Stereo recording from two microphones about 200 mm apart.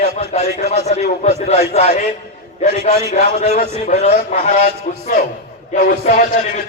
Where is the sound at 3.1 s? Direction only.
30° left (ahead or behind).